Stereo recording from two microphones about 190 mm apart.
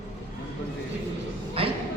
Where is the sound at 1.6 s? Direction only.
30° right (ahead or behind).